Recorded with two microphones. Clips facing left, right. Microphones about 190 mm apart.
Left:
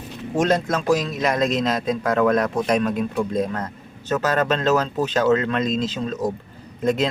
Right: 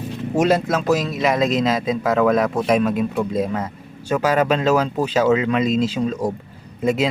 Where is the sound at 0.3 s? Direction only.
5° right (ahead or behind).